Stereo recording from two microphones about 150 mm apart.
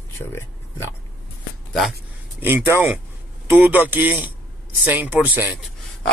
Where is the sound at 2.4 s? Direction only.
10° right (ahead or behind).